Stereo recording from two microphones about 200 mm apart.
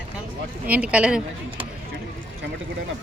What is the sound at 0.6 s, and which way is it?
Speech, 5° right (ahead or behind).